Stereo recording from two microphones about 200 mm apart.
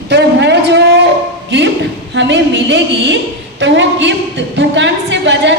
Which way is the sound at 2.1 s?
65° right (ahead or behind).